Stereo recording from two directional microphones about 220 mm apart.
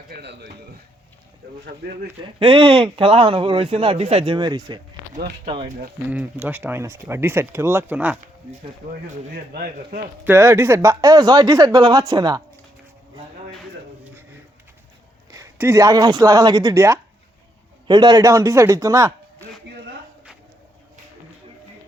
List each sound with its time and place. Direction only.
0.1 s a man's voice: 50° right (ahead or behind)
1.8 s a man's voice: 50° right (ahead or behind)
2.2 s speech: 25° right (ahead or behind)
6.1 s speech: 5° right (ahead or behind)
9.0 s speech: 40° right (ahead or behind)
10.2 s speech: 10° right (ahead or behind)
15.3 s speech: 15° right (ahead or behind)